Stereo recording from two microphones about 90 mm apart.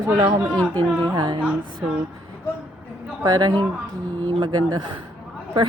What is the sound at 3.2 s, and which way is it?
Speech, 50° right (ahead or behind).